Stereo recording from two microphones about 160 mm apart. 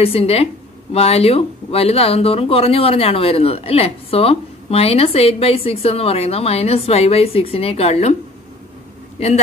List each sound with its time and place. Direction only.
0.0 s speech: 35° left (ahead or behind)
9.2 s speech: 40° left (ahead or behind)